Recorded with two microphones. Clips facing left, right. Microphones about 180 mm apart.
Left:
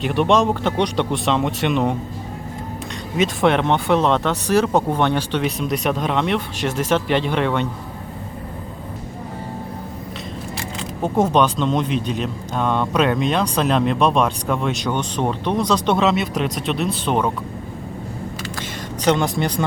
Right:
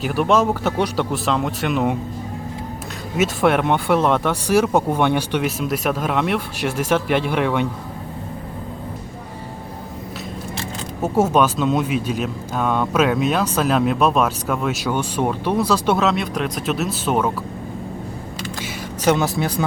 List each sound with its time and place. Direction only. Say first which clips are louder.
0.0 s speech: left 1 dB; 5° right (ahead or behind)
3.2 s speech: even; 5° right (ahead or behind)
11.0 s speech: even; 5° right (ahead or behind)
18.6 s speech: even; 5° right (ahead or behind)